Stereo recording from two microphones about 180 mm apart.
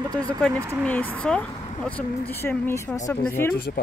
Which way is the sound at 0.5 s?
15° right (ahead or behind).